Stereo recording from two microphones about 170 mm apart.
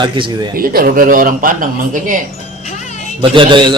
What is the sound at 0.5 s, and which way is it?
Speech, 55° right (ahead or behind).